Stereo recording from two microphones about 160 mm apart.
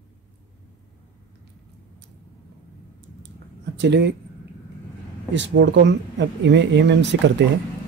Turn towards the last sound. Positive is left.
turn(degrees=-90)